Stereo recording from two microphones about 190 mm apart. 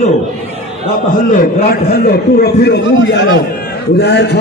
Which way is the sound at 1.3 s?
50° left (ahead or behind).